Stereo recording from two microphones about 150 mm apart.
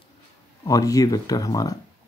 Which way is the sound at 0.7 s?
25° left (ahead or behind).